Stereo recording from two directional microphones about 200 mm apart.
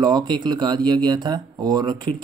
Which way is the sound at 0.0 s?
20° right (ahead or behind).